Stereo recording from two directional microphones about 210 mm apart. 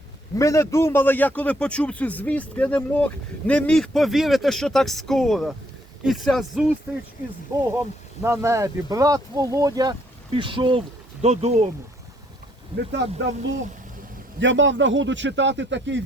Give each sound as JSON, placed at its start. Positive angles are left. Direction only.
{"t": 0.3, "sound": "a man's voice", "side_deg": 15}
{"t": 8.2, "sound": "speech", "side_deg": -10}
{"t": 12.9, "sound": "a man's voice", "side_deg": -55}
{"t": 14.3, "sound": "a man's voice", "side_deg": -60}